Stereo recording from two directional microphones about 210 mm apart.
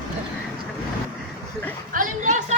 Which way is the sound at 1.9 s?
40° right (ahead or behind).